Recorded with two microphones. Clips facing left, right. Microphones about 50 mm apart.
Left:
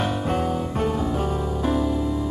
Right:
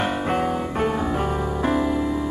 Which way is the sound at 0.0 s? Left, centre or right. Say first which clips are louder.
Right 1 dB; right.